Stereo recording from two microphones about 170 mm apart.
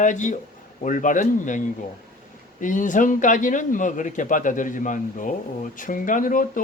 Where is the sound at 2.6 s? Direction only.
50° left (ahead or behind).